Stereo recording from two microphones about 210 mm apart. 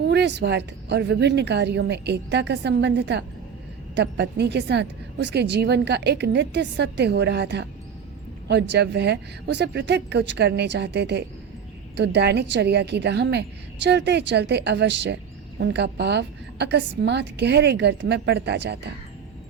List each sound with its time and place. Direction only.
0.0 s a woman's voice: 55° right (ahead or behind)